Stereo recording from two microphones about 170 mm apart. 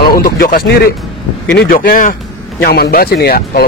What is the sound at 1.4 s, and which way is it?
A man's voice, 85° left.